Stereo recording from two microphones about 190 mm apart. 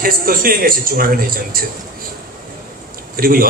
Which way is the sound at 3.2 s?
50° right (ahead or behind).